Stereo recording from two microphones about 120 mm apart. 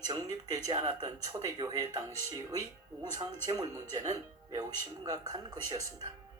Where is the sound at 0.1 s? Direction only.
30° right (ahead or behind).